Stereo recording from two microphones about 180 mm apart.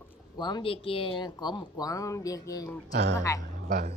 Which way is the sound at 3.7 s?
45° right (ahead or behind).